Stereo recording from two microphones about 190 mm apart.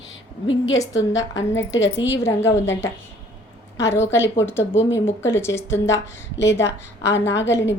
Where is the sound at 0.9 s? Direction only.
75° left (ahead or behind).